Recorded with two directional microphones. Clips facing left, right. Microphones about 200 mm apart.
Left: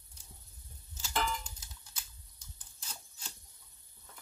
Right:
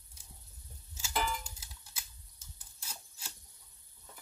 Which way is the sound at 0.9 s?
10° right (ahead or behind).